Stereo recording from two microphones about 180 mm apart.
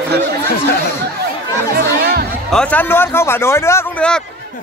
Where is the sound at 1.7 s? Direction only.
60° right (ahead or behind).